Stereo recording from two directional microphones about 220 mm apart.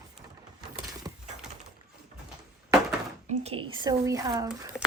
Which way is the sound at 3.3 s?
25° right (ahead or behind).